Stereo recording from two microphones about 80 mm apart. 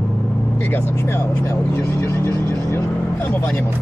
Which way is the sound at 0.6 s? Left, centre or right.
Left.